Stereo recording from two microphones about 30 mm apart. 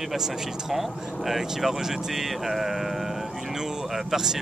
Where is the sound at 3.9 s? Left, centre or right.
Centre.